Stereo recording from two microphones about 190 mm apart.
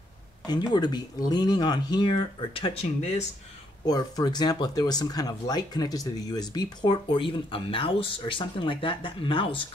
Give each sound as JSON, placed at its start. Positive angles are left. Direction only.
{"t": 0.5, "sound": "speech", "side_deg": 20}